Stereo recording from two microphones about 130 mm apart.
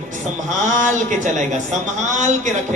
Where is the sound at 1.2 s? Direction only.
70° right (ahead or behind).